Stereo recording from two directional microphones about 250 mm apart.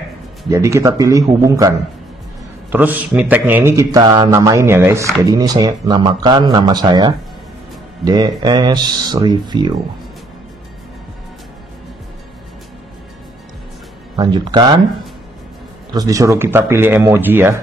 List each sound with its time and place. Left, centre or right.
0.5 s speech: centre
2.7 s speech: centre
14.1 s speech: centre
15.9 s speech: centre